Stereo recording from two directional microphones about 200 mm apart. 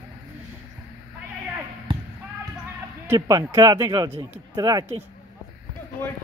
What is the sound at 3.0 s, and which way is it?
Speech, 20° right (ahead or behind).